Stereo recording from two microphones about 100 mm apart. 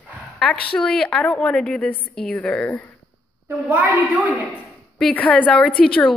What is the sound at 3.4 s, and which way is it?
Speech, 15° right (ahead or behind).